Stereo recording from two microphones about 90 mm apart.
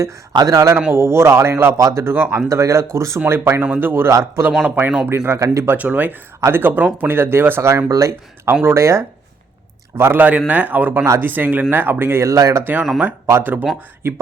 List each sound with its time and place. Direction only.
0.3 s speech: 40° right (ahead or behind)
4.7 s speech: 15° right (ahead or behind)
5.0 s speech: 25° right (ahead or behind)
5.7 s speech: 20° right (ahead or behind)
10.0 s speech: 20° right (ahead or behind); by 12.6 s 35° right (ahead or behind)
13.3 s speech: 20° right (ahead or behind)